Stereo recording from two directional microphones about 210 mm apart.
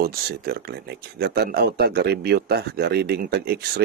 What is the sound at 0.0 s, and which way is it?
Speech, 50° right (ahead or behind).